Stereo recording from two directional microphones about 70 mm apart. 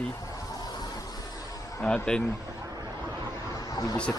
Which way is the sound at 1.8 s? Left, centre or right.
Centre.